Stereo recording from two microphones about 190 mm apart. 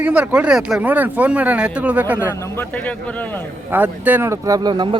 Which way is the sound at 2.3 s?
15° left (ahead or behind).